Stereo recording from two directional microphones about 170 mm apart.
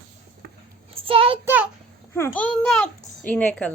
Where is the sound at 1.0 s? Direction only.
30° right (ahead or behind).